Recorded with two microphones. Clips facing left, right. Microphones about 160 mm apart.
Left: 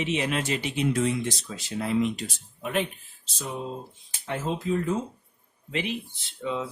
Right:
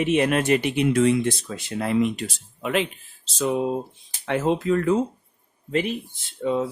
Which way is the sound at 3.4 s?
80° right.